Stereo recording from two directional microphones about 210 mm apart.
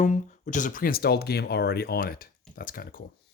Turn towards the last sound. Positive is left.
turn(degrees=40)  # may be behind; listen again after turning